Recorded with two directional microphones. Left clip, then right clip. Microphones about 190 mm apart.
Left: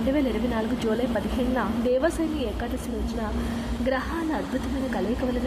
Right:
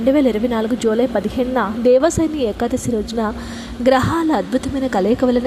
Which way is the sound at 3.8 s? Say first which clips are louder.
Right 13 dB; 35° right (ahead or behind).